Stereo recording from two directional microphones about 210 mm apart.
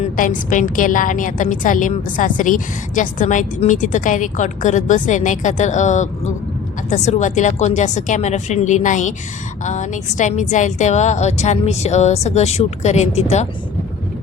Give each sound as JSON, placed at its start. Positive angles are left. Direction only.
{"t": 0.0, "sound": "a woman's voice", "side_deg": 35}